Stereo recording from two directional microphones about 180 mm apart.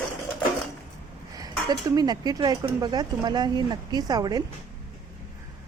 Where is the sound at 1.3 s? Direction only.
20° right (ahead or behind).